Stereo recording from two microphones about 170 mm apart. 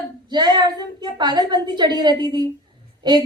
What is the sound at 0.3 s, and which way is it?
A woman's voice, 25° right (ahead or behind).